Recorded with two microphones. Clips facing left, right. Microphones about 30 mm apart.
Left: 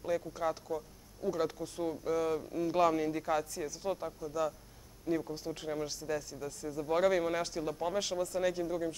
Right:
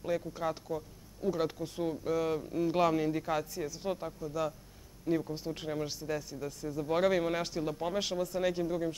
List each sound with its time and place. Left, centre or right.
0.0 s speech: centre